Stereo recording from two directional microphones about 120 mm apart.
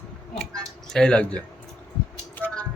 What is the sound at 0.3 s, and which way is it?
Speech, 5° left (ahead or behind).